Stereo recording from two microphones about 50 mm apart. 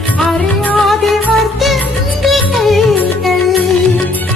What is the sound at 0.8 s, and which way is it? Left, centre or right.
Music, centre.